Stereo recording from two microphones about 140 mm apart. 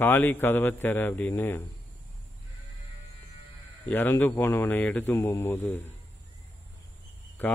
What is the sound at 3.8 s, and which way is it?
A man's voice, 15° left (ahead or behind).